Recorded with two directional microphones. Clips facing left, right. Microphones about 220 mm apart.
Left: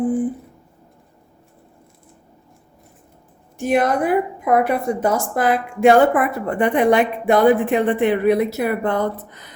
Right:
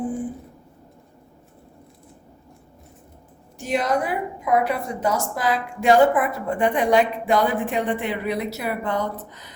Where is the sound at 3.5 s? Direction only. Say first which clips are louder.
Left 5 dB; 55° left (ahead or behind).